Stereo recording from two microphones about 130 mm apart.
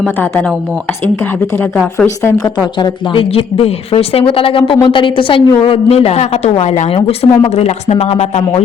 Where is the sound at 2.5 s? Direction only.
35° left (ahead or behind).